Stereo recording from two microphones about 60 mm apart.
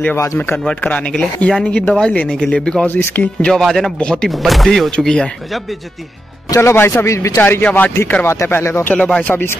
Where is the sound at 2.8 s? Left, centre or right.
Left.